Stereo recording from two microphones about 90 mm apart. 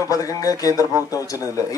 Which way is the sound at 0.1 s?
40° left (ahead or behind).